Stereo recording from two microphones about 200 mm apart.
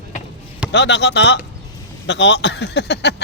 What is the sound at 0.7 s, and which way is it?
Speech, 60° left (ahead or behind).